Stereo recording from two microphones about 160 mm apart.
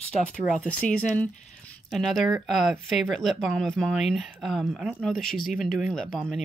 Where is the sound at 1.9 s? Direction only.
Centre (ahead or behind).